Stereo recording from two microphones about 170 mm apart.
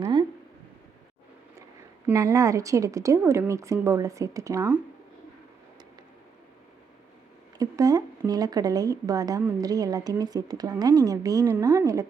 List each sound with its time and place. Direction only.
0.0 s speech: 25° right (ahead or behind)
2.0 s speech: 20° right (ahead or behind)
7.6 s speech: 20° right (ahead or behind)